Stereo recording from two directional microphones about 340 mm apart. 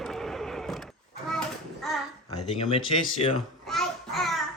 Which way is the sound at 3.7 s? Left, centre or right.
Centre.